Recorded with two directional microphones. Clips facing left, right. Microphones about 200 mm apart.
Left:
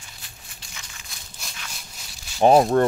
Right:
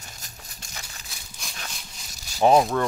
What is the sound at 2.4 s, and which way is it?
Speech, 20° left (ahead or behind).